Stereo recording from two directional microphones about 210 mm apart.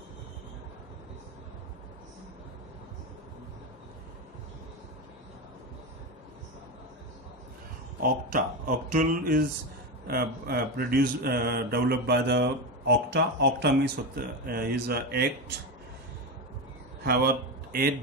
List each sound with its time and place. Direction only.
8.0 s speech: 40° right (ahead or behind)
17.0 s speech: 45° right (ahead or behind)